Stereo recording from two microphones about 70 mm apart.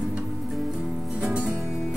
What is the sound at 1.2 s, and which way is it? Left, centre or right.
Music, centre.